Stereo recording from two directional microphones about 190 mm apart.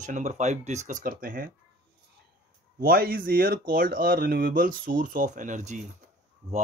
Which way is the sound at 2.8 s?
50° right (ahead or behind).